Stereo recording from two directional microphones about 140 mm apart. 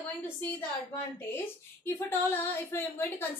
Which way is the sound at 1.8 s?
15° left (ahead or behind).